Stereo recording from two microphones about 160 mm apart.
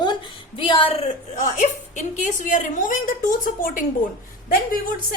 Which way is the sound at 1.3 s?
50° left (ahead or behind).